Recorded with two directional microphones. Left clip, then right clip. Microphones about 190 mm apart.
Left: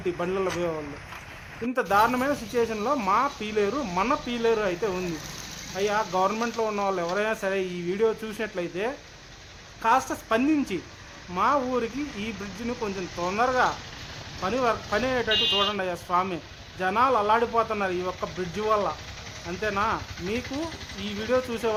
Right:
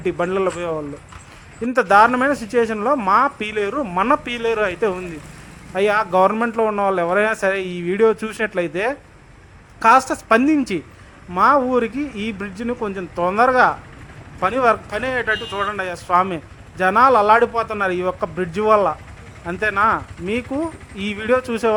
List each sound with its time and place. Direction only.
0.0 s speech: 25° right (ahead or behind)
1.7 s speech: 30° right (ahead or behind)